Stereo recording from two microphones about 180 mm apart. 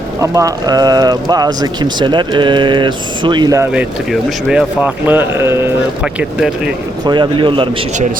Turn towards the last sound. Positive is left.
turn(degrees=-30)  # may be behind; listen again after turning